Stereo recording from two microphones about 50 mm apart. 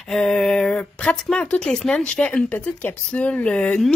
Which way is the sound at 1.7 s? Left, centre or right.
Centre.